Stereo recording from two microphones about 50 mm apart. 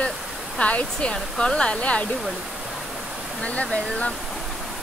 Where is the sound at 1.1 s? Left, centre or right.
Centre.